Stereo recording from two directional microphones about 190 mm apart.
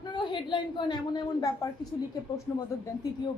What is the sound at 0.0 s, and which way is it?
A woman's voice, 25° left (ahead or behind).